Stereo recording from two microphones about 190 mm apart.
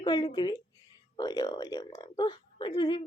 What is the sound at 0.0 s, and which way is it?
A woman's voice, 20° left (ahead or behind).